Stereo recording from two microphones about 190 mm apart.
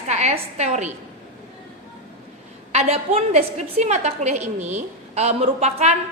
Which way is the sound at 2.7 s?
35° right (ahead or behind).